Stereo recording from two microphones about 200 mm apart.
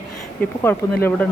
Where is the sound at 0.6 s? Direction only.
10° left (ahead or behind).